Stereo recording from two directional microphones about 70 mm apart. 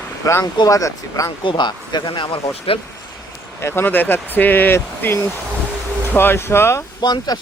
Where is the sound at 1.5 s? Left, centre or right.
Left.